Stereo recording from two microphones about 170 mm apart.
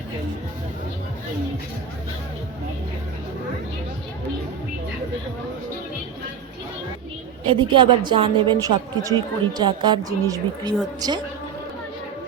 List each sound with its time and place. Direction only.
7.4 s a woman's voice: 30° right (ahead or behind)